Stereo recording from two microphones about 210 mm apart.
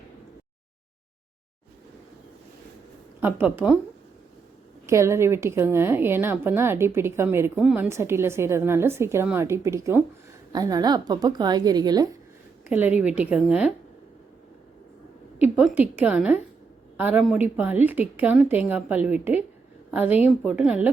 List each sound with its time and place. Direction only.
3.2 s a woman's voice: 10° right (ahead or behind)
4.9 s a woman's voice: 15° right (ahead or behind)
12.6 s a woman's voice: 10° right (ahead or behind)
15.4 s a woman's voice: 5° right (ahead or behind)